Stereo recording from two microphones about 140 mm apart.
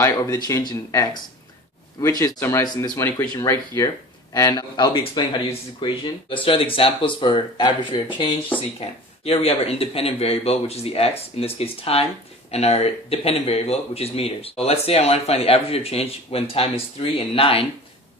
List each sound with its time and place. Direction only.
0.0 s speech: 25° left (ahead or behind)
2.6 s speech: 30° left (ahead or behind)
3.0 s speech: 20° left (ahead or behind); by 17.7 s 40° left (ahead or behind)